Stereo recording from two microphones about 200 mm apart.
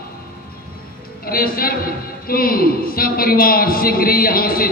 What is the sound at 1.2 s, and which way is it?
A man's voice, 45° left (ahead or behind).